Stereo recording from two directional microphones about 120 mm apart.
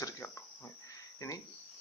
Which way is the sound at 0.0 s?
25° left (ahead or behind).